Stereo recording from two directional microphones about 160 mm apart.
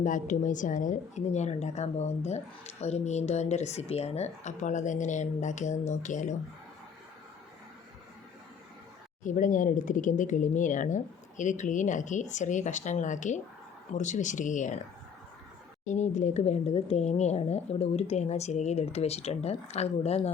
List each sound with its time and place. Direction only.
0.0 s speech: 55° left (ahead or behind)
9.2 s speech: 55° left (ahead or behind)
15.9 s speech: 50° left (ahead or behind)